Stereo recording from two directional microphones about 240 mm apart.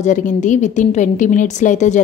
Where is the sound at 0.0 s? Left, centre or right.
Left.